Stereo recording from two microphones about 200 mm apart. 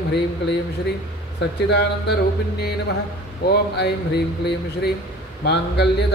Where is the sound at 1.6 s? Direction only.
55° left (ahead or behind).